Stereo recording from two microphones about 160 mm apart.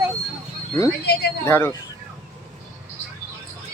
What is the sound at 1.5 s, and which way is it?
Speech, 15° left (ahead or behind).